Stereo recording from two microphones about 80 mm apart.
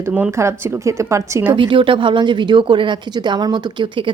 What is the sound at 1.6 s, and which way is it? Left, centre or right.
Speech, right.